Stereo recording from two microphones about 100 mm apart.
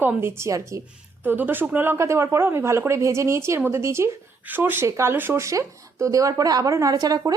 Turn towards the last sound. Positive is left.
turn(degrees=-40)  # may be behind; listen again after turning